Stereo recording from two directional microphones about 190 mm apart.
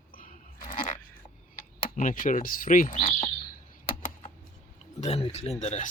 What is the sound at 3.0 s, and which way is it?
Chirp, 30° left (ahead or behind).